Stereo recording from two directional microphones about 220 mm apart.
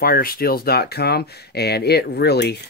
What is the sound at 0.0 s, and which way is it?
Speech, 40° left (ahead or behind).